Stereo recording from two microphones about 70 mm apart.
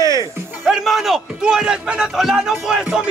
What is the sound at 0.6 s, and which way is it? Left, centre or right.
A man's voice, centre.